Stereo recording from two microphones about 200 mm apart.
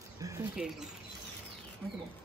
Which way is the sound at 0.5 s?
Centre (ahead or behind).